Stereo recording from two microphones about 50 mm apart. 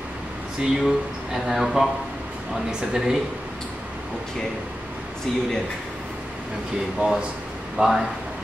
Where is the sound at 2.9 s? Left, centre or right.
Centre.